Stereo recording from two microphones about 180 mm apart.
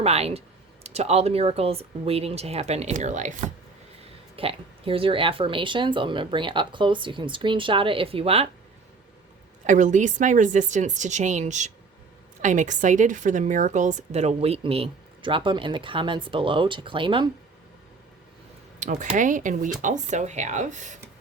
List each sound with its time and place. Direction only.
0.0 s speech: 35° right (ahead or behind)
4.4 s speech: 30° right (ahead or behind)
9.6 s a woman's voice: 45° right (ahead or behind); by 17.2 s 30° right (ahead or behind)
18.8 s a woman's voice: 45° right (ahead or behind)